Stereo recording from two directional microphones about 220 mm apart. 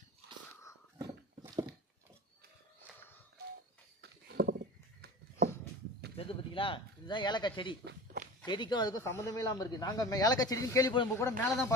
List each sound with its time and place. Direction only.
0.9 s dog: 15° right (ahead or behind)
4.0 s wild animals: 50° right (ahead or behind)
6.1 s speech: 25° left (ahead or behind)
7.8 s walk: 45° right (ahead or behind)
8.5 s speech: 20° left (ahead or behind)